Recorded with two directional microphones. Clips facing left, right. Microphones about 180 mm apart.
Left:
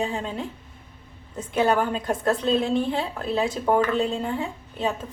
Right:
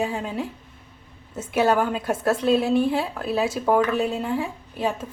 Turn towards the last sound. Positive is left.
turn(degrees=-10)  # may be behind; listen again after turning